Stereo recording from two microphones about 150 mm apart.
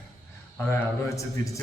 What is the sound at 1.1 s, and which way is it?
Speech, 20° left (ahead or behind).